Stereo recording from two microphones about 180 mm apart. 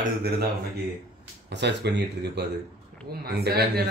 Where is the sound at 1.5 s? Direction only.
70° right (ahead or behind).